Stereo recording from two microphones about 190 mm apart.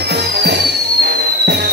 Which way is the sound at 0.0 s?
60° right (ahead or behind).